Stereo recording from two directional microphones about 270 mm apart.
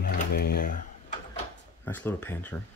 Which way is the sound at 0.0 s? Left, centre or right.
Left.